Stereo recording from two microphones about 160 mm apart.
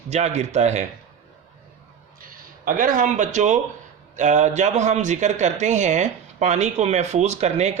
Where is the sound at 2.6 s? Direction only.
60° right (ahead or behind).